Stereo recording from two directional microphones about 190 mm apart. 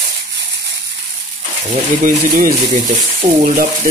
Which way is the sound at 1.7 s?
45° right (ahead or behind).